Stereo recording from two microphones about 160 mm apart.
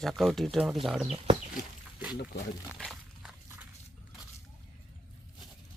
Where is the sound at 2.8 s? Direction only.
Centre (ahead or behind).